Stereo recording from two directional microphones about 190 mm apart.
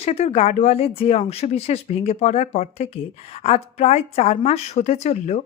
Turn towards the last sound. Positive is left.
turn(degrees=35)  # may be behind; listen again after turning